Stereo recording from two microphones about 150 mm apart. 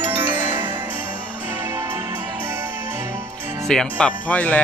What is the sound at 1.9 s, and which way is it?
Music, 15° right (ahead or behind).